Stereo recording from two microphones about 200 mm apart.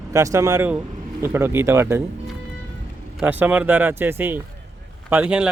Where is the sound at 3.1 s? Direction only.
10° right (ahead or behind).